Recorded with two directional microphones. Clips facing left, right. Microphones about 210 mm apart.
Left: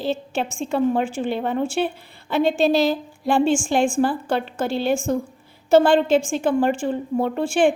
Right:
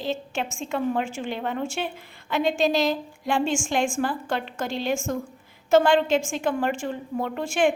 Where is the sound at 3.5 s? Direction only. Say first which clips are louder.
Left 5 dB; 35° left (ahead or behind).